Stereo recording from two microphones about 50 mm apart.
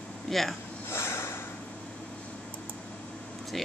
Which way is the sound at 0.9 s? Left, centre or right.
Left.